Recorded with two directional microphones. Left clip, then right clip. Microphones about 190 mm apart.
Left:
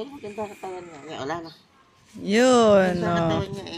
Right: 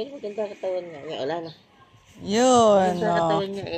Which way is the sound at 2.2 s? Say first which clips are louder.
Even; 40° left (ahead or behind).